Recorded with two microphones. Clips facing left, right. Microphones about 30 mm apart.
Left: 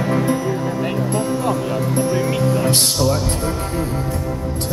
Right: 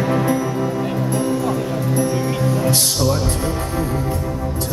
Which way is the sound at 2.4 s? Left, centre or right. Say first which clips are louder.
Right 1 dB; left.